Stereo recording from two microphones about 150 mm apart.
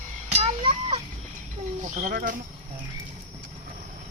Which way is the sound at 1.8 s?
55° right (ahead or behind).